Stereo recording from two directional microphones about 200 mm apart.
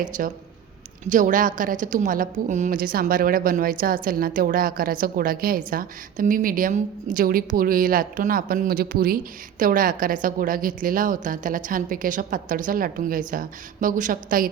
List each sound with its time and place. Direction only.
0.2 s a woman's voice: 45° right (ahead or behind)